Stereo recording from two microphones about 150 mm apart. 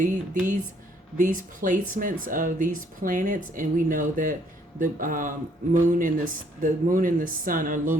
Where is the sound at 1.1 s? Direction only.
60° right (ahead or behind).